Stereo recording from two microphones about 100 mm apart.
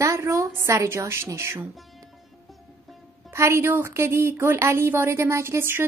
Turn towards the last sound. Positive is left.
turn(degrees=-25)  # may be behind; listen again after turning